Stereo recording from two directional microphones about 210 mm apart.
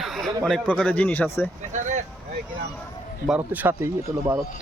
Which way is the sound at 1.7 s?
35° right (ahead or behind).